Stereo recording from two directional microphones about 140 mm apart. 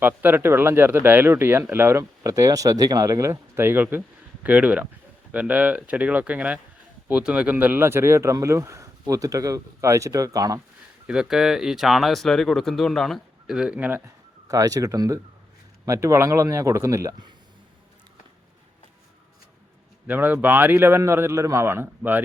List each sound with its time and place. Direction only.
0.0 s speech: 15° right (ahead or behind)
11.0 s speech: 5° right (ahead or behind)
14.4 s speech: 25° right (ahead or behind)
20.1 s speech: 15° right (ahead or behind)